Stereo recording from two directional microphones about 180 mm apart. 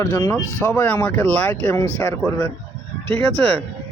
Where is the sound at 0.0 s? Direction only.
15° left (ahead or behind).